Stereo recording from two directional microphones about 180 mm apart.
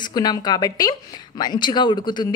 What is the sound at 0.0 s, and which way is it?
Speech, 20° left (ahead or behind).